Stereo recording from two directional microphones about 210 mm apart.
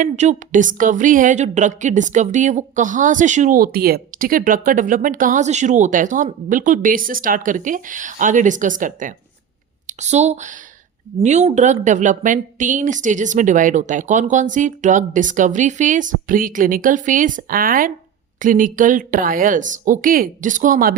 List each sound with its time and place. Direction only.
0.0 s speech: 35° right (ahead or behind)